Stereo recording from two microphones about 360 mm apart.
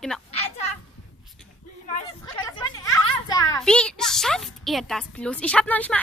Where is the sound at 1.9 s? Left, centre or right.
Centre.